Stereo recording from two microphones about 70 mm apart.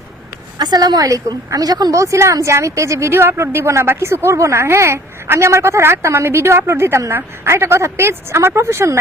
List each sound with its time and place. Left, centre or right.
0.6 s a woman's voice: right
2.0 s a woman's voice: right